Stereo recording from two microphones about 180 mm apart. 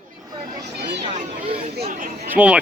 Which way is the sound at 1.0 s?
45° right (ahead or behind).